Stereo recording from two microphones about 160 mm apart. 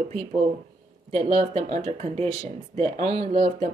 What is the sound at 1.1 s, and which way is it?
Speech, 50° right (ahead or behind).